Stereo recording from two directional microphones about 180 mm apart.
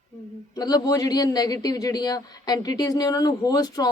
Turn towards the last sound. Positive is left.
turn(degrees=20)  # may be behind; listen again after turning